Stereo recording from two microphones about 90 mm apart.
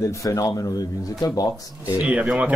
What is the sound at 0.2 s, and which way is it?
A man's voice, 40° left (ahead or behind).